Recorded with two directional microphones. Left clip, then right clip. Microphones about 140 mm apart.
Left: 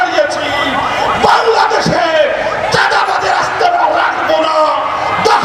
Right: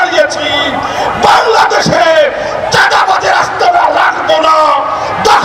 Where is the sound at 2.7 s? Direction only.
25° right (ahead or behind).